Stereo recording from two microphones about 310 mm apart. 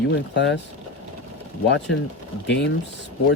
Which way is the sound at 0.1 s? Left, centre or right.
Left.